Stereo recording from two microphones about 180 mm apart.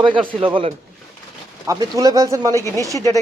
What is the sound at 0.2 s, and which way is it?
Speech, 30° right (ahead or behind).